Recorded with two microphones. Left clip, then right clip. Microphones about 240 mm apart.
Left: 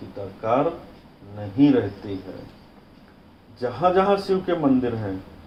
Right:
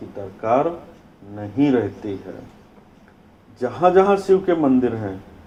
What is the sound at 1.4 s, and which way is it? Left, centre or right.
Speech, right.